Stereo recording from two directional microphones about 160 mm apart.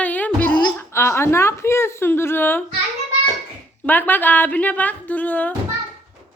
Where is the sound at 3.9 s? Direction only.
10° left (ahead or behind).